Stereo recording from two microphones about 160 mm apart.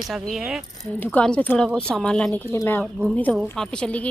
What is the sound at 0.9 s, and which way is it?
A woman's voice, 10° left (ahead or behind).